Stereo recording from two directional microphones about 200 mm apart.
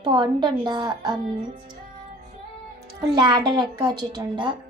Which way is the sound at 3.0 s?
20° right (ahead or behind).